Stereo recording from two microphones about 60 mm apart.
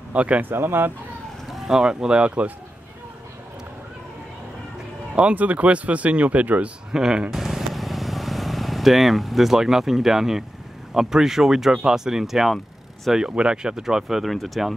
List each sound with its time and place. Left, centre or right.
0.1 s speech: right
0.5 s speech: right
1.7 s speech: centre
5.1 s speech: right
6.9 s vehicle: centre
10.9 s speech: centre
13.3 s speech: centre